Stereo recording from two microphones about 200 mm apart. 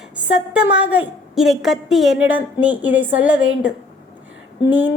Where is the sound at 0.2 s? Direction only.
5° right (ahead or behind).